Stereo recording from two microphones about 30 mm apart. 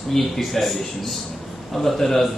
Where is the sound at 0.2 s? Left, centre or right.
Centre.